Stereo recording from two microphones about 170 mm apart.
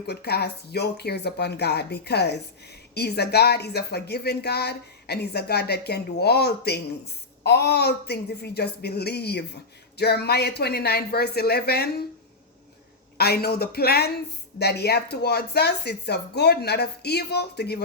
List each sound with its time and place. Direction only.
0.1 s speech: 70° left (ahead or behind)
13.1 s speech: 70° left (ahead or behind)